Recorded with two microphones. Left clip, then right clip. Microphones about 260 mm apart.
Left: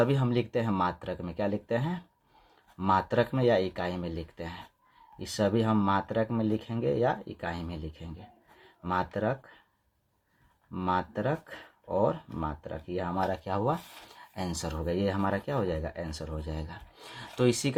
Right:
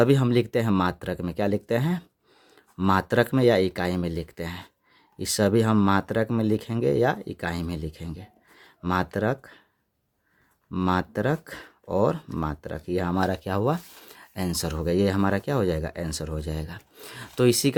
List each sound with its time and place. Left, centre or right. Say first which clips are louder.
0.0 s speech: right 6 dB; right
10.7 s speech: right 4 dB; right